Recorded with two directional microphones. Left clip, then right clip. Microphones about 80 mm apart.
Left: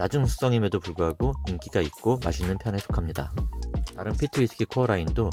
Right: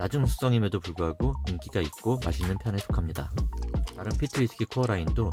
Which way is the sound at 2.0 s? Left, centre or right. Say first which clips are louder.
Left 5 dB; left.